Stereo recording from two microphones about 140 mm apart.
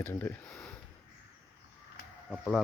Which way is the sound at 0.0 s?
15° left (ahead or behind).